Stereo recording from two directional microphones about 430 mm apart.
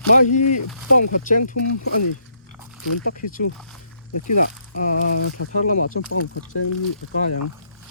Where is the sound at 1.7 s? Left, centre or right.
Left.